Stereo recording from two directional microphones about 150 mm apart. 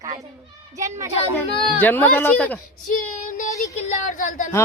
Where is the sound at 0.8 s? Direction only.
20° right (ahead or behind).